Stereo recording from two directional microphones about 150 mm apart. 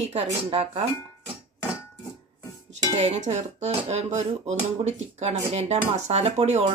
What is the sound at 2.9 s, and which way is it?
Speech, 45° right (ahead or behind).